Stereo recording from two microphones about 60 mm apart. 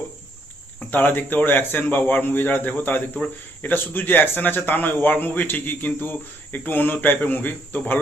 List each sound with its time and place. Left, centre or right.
0.9 s a man's voice: left